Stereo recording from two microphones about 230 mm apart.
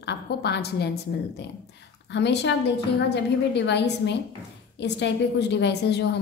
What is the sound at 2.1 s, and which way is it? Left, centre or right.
A woman's voice, left.